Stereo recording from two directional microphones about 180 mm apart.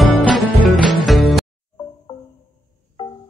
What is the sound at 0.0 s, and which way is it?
Music, centre (ahead or behind).